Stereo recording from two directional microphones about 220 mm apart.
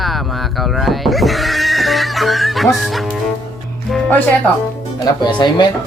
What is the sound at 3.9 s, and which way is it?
Music, 5° left (ahead or behind).